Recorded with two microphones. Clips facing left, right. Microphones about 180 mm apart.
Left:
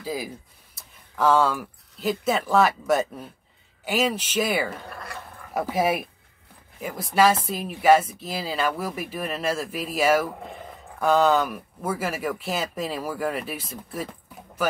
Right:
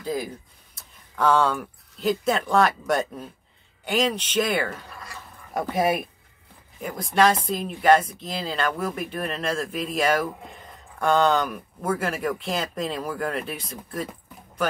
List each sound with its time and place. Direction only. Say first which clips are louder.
0.0 s speech: right 2 dB; 5° left (ahead or behind)
4.8 s speech: left 4 dB; 60° left (ahead or behind)
5.5 s speech: even; 5° left (ahead or behind)